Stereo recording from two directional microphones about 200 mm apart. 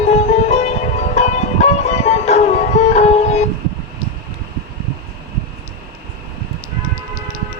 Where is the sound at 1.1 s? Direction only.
35° left (ahead or behind).